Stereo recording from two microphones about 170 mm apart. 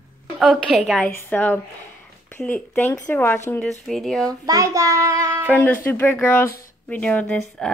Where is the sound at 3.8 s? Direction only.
Centre (ahead or behind).